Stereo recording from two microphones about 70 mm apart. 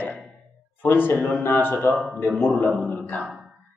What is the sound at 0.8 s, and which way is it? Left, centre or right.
A man's voice, left.